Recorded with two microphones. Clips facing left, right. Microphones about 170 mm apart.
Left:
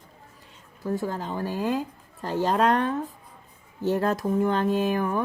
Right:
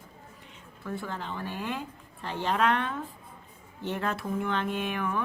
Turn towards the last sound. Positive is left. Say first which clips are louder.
# left 7 dB
turn(degrees=40)  # may be behind; listen again after turning